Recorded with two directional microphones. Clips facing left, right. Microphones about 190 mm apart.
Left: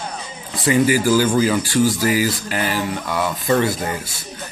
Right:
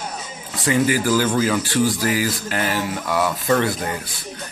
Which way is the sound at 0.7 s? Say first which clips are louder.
Left 3 dB; 10° left (ahead or behind).